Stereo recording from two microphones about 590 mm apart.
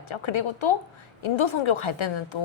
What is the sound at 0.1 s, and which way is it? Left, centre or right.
A woman's voice, left.